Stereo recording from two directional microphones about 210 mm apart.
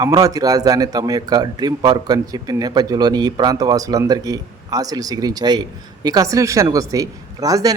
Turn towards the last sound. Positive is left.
turn(degrees=-15)  # may be behind; listen again after turning